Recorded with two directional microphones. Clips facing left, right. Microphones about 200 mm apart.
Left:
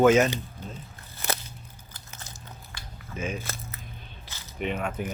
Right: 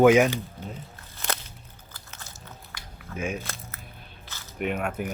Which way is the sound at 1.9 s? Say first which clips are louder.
Right 1 dB; 20° left (ahead or behind).